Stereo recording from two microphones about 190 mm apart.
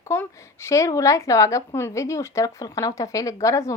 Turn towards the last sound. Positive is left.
turn(degrees=15)  # may be behind; listen again after turning